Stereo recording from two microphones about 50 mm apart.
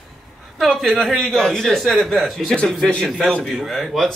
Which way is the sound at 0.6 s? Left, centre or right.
Centre.